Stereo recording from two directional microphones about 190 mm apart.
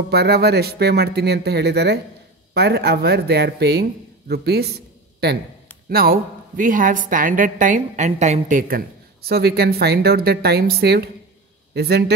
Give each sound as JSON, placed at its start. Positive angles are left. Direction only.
{"t": 0.1, "sound": "a woman's voice", "side_deg": -60}